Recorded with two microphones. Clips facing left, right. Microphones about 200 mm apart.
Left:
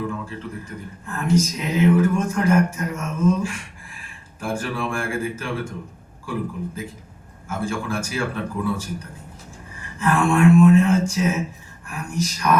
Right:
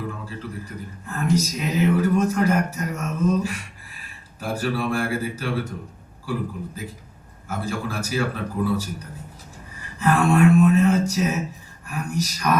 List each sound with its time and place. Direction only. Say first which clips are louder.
0.3 s speech: left 1 dB; 35° right (ahead or behind)
7.4 s speech: left 2 dB; 40° right (ahead or behind)